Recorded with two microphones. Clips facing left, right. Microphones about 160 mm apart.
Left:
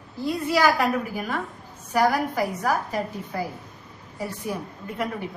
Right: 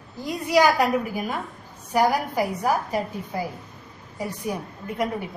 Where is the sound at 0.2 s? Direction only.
15° right (ahead or behind).